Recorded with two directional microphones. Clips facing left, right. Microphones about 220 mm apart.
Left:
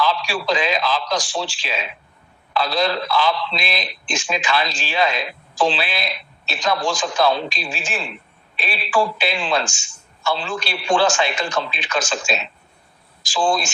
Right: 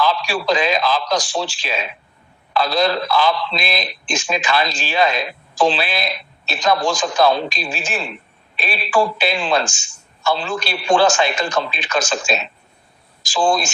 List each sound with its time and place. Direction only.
0.0 s a man's voice: 45° right (ahead or behind)